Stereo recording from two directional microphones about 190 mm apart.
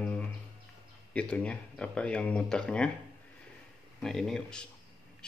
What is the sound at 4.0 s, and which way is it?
Speech, centre (ahead or behind).